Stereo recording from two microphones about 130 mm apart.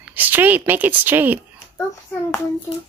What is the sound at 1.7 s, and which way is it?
Speech, 20° left (ahead or behind).